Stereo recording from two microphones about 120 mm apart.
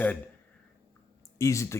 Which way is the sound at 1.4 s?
25° left (ahead or behind).